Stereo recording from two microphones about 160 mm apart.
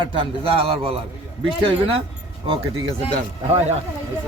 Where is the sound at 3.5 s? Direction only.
40° right (ahead or behind).